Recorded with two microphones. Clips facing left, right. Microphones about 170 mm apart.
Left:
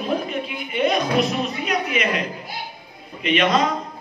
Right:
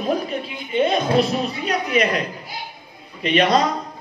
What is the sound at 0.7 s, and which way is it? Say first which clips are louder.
A woman's voice: right 2 dB; 25° right (ahead or behind).